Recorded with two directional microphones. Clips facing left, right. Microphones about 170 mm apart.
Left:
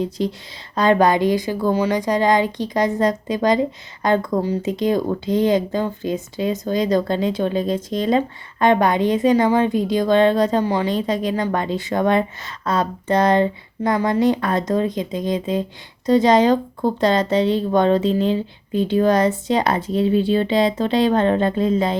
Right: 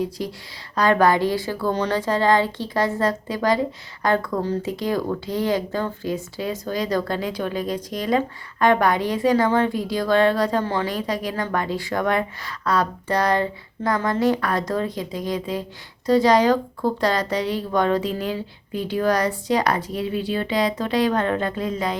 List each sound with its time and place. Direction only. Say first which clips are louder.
0.0 s a woman's voice: left 4 dB; 25° left (ahead or behind)